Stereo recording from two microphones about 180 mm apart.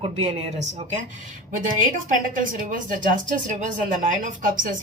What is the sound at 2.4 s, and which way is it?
Speech, 50° right (ahead or behind).